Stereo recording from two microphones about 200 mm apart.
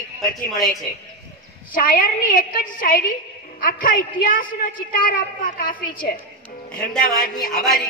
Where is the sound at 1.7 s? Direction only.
45° left (ahead or behind).